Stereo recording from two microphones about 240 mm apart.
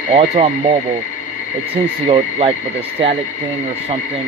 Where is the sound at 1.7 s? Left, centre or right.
Right.